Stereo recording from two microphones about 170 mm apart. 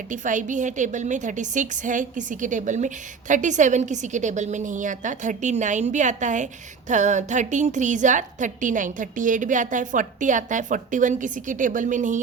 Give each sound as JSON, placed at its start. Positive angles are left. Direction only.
{"t": 0.1, "sound": "a woman's voice", "side_deg": -50}